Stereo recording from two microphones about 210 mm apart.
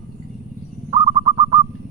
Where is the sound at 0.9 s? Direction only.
20° right (ahead or behind).